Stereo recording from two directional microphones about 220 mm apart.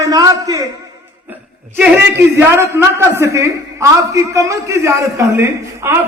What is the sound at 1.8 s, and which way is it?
A man's voice, 10° right (ahead or behind).